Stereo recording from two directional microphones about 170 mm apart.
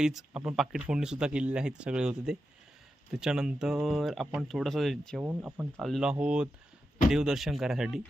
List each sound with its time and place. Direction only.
0.0 s speech: 5° right (ahead or behind)